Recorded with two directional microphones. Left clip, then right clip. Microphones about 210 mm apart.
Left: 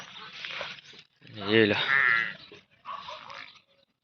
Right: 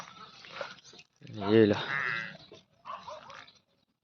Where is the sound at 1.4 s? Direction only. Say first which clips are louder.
Left 1 dB; 25° right (ahead or behind).